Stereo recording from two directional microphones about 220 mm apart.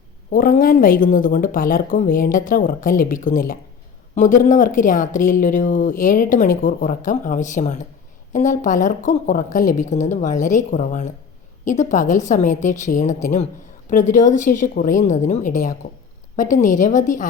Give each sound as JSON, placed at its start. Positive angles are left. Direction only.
{"t": 0.3, "sound": "speech", "side_deg": 40}